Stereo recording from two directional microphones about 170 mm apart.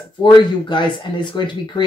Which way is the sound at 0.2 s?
25° left (ahead or behind).